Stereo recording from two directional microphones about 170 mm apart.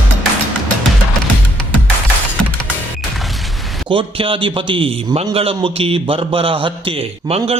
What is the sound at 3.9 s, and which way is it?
A man's voice, 30° right (ahead or behind).